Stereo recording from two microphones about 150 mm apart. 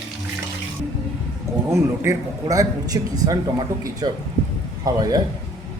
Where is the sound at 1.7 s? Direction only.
20° right (ahead or behind).